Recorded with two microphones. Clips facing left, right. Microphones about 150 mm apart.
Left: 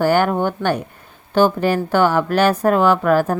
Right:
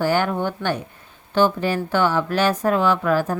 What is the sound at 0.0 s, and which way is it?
Speech, 50° left (ahead or behind).